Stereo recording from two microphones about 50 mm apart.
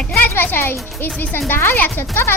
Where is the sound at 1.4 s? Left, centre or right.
Left.